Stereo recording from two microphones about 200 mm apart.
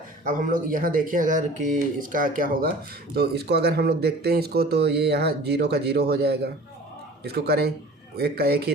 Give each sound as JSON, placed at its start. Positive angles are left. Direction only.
{"t": 0.3, "sound": "speech", "side_deg": -40}